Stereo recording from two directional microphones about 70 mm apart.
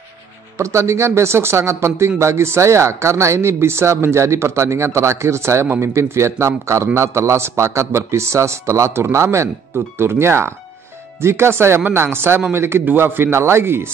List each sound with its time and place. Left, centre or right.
0.6 s a man's voice: right